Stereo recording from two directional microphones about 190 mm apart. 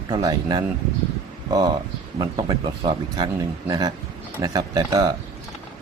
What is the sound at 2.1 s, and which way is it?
Speech, 20° right (ahead or behind).